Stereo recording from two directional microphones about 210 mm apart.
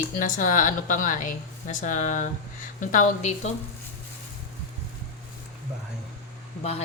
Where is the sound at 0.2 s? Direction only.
40° left (ahead or behind).